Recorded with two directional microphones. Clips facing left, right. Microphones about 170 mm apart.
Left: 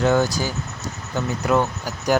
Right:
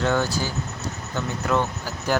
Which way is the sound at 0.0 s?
15° left (ahead or behind).